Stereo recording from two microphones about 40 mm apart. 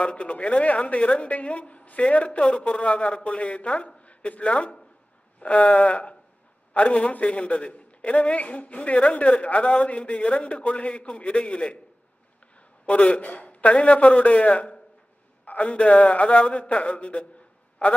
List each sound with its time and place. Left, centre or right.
0.0 s a man's voice: left
3.0 s a man's voice: centre
3.3 s a man's voice: left
12.8 s a man's voice: left